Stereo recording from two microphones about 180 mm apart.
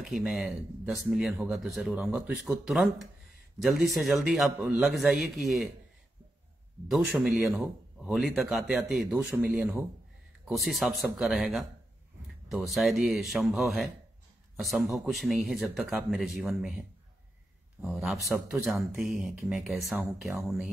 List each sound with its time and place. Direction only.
0.0 s a man's voice: centre (ahead or behind)
6.9 s a man's voice: centre (ahead or behind)
17.8 s a man's voice: centre (ahead or behind)